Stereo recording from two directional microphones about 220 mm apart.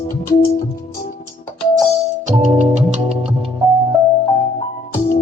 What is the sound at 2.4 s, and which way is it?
Music, 30° right (ahead or behind).